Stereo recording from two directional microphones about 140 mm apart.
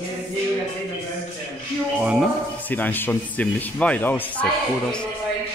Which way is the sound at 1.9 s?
10° right (ahead or behind).